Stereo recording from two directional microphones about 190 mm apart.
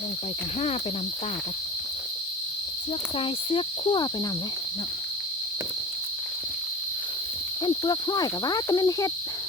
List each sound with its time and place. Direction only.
3.2 s cricket: 30° left (ahead or behind)
7.6 s cricket: 20° left (ahead or behind)